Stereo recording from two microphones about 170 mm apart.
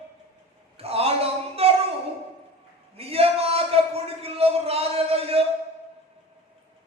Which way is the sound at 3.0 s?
35° right (ahead or behind).